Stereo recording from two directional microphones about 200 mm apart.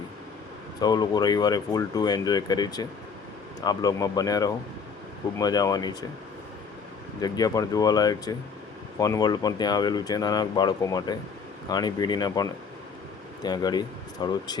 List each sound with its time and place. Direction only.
0.8 s speech: 20° left (ahead or behind)
7.2 s speech: 20° left (ahead or behind)